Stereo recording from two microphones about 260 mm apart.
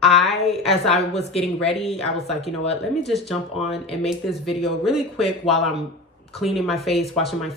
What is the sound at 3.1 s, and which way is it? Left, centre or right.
Speech, centre.